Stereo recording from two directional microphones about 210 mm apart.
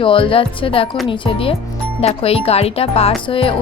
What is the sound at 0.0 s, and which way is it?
Speech, 25° left (ahead or behind).